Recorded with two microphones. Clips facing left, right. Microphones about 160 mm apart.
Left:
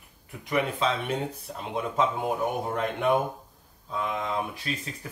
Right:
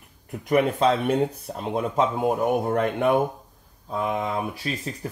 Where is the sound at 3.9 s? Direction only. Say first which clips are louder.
Right 4 dB; 45° right (ahead or behind).